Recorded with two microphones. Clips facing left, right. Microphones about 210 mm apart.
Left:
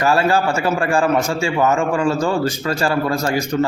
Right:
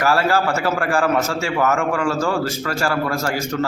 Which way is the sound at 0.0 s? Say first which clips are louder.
Left 2 dB; 15° left (ahead or behind).